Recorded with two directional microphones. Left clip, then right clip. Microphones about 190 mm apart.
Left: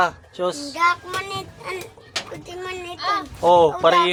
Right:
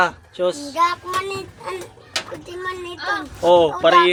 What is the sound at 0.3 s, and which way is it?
Speech, 15° left (ahead or behind).